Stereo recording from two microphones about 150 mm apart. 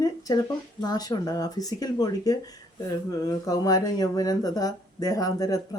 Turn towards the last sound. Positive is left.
turn(degrees=25)  # may be behind; listen again after turning